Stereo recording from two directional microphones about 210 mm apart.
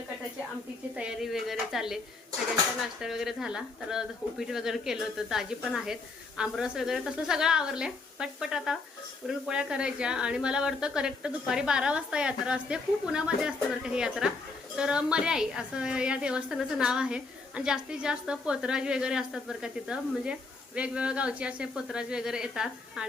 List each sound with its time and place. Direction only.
0.9 s a woman's voice: 5° right (ahead or behind)
3.0 s a woman's voice: centre (ahead or behind)